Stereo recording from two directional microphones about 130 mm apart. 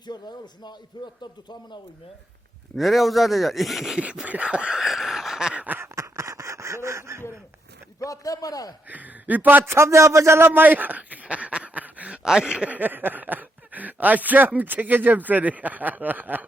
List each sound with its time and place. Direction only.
0.0 s speech: 35° left (ahead or behind)
2.7 s speech: centre (ahead or behind); by 7.2 s 20° right (ahead or behind)
7.9 s a man's voice: 25° left (ahead or behind)
8.9 s a man's voice: 10° right (ahead or behind)